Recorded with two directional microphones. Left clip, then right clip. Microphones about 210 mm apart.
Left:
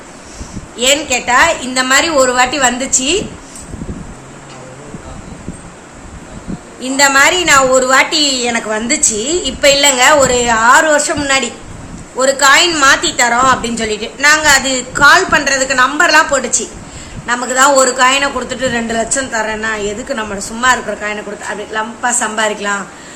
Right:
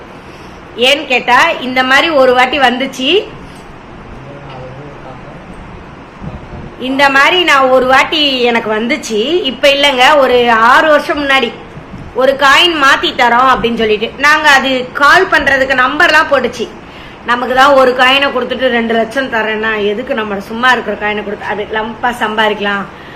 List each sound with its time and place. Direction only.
0.8 s a woman's voice: 25° left (ahead or behind)
6.7 s a woman's voice: 25° left (ahead or behind)